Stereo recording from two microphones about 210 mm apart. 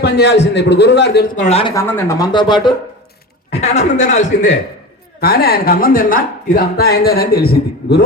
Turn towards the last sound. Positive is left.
turn(degrees=45)  # may be behind; listen again after turning